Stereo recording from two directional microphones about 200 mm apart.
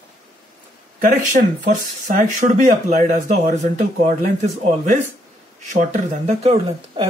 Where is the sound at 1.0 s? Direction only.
40° right (ahead or behind).